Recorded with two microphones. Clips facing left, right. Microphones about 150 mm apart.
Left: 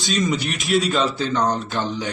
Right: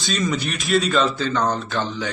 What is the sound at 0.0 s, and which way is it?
Speech, 15° left (ahead or behind).